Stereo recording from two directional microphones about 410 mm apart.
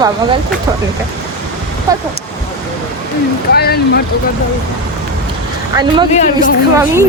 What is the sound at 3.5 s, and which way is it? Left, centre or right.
Speech, left.